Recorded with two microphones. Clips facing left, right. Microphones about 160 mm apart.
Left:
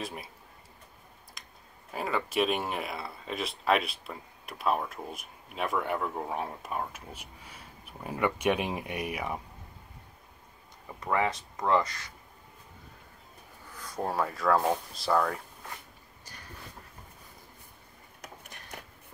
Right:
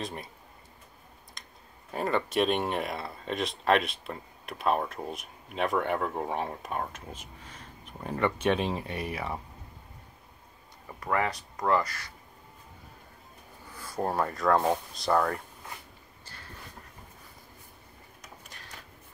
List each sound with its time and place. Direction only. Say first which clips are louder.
0.0 s speech: right 1 dB; 5° left (ahead or behind)
1.9 s speech: right 3 dB; 5° left (ahead or behind)
11.0 s speech: even; 15° left (ahead or behind)
13.7 s speech: right 2 dB; 5° right (ahead or behind)
18.2 s a sound: left 4 dB; 60° left (ahead or behind)